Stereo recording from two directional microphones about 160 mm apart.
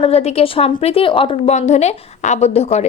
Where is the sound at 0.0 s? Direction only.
40° left (ahead or behind).